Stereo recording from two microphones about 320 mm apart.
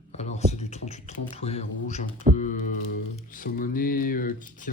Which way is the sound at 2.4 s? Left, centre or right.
Left.